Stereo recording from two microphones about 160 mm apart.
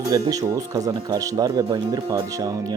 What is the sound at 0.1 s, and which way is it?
Speech, 20° right (ahead or behind).